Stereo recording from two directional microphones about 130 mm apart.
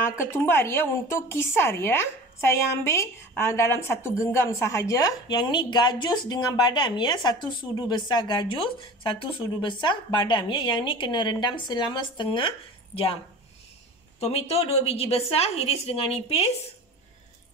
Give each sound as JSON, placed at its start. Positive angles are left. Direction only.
{"t": 0.2, "sound": "a woman's voice", "side_deg": 20}
{"t": 14.2, "sound": "a woman's voice", "side_deg": 50}